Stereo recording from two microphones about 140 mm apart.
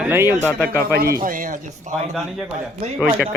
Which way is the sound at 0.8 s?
90° right.